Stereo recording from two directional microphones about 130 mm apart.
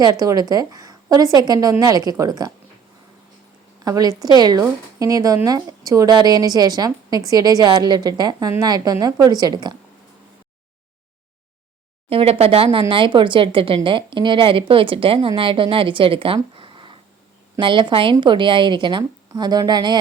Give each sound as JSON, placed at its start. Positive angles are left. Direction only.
{"t": 0.0, "sound": "a woman's voice", "side_deg": -30}
{"t": 3.8, "sound": "a woman's voice", "side_deg": -30}
{"t": 12.0, "sound": "a woman's voice", "side_deg": -50}